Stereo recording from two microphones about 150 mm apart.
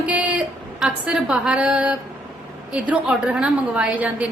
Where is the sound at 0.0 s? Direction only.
10° right (ahead or behind).